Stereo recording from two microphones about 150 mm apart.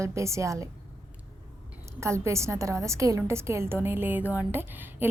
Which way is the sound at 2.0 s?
20° right (ahead or behind).